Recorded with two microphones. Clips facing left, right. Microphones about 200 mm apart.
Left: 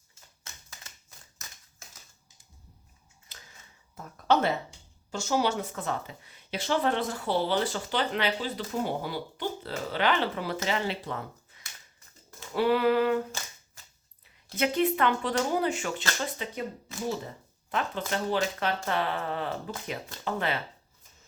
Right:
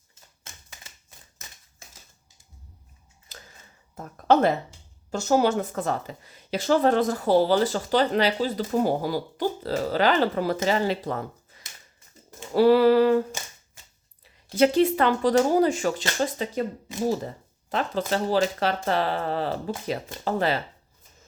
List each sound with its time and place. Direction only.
3.9 s speech: 45° right (ahead or behind)
14.6 s speech: 30° right (ahead or behind)